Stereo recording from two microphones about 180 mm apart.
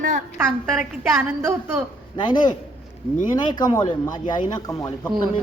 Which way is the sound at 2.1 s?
25° left (ahead or behind).